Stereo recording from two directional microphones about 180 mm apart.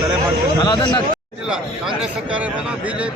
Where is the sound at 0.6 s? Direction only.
25° left (ahead or behind).